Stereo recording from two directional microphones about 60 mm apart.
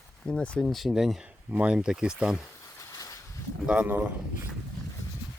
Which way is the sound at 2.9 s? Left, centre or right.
Left.